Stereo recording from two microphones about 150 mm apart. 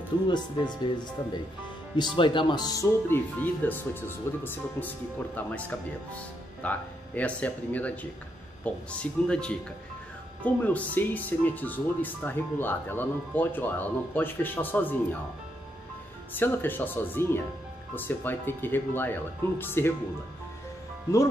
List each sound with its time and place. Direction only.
0.3 s speech: 30° left (ahead or behind)
2.0 s speech: 35° left (ahead or behind); by 15.0 s 10° left (ahead or behind)
16.3 s speech: 15° left (ahead or behind)